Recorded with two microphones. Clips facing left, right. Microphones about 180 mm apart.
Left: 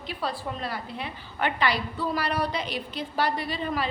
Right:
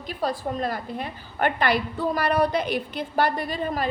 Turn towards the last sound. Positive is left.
turn(degrees=-45)  # may be behind; listen again after turning